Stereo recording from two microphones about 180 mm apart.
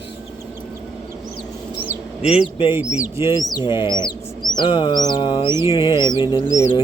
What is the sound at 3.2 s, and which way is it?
Bird, 25° left (ahead or behind).